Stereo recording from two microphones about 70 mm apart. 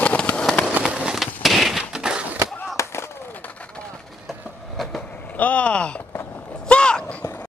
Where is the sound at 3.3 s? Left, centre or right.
Left.